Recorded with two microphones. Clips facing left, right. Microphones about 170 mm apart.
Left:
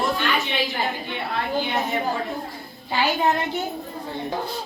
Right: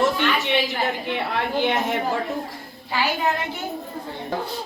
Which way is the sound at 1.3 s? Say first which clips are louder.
Right 1 dB; 85° right.